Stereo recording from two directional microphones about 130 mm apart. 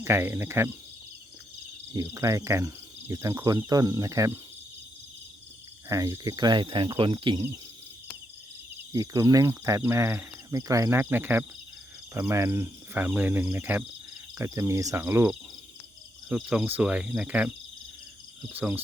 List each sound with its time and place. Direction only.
0.0 s speech: 20° right (ahead or behind)
1.9 s speech: 25° right (ahead or behind)
5.9 s speech: 25° right (ahead or behind)
8.9 s speech: 25° right (ahead or behind)
16.3 s speech: 10° right (ahead or behind)